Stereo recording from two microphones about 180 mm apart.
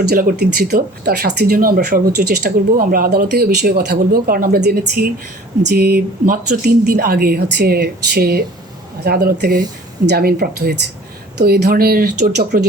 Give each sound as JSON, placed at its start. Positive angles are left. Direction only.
{"t": 0.1, "sound": "speech", "side_deg": -55}